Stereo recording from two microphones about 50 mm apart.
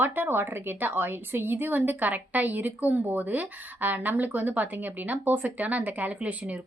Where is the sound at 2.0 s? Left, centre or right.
Right.